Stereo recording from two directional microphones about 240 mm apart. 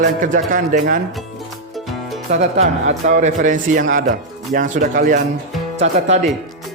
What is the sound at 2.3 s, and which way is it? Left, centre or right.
Speech, right.